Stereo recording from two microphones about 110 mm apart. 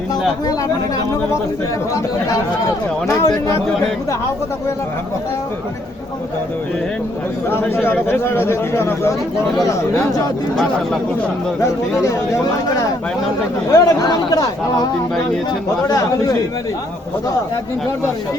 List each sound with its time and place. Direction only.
3.2 s speech: 35° left (ahead or behind)
7.5 s speech: 20° left (ahead or behind)
11.6 s speech: 30° left (ahead or behind)
15.9 s speech: 30° left (ahead or behind)